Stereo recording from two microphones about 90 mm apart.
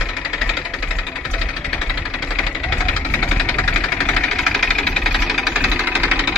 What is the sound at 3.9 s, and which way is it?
Engine knocking, 10° left (ahead or behind).